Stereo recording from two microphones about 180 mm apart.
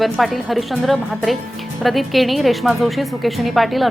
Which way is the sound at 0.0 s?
Centre (ahead or behind).